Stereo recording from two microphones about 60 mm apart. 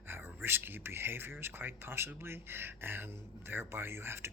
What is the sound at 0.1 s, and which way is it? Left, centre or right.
Speech, right.